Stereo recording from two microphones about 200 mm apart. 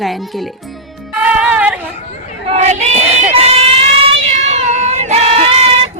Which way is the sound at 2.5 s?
35° right (ahead or behind).